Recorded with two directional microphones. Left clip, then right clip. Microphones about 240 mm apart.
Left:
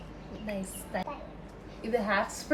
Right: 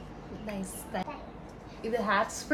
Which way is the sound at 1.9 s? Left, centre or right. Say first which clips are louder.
Even; centre.